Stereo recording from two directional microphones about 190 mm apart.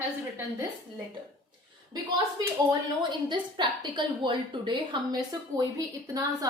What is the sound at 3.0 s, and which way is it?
A woman's voice, 25° right (ahead or behind).